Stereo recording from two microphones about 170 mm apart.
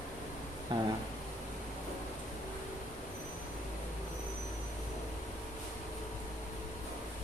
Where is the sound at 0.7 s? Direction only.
25° right (ahead or behind).